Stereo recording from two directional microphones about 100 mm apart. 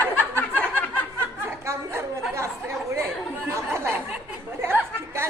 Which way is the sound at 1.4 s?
25° right (ahead or behind).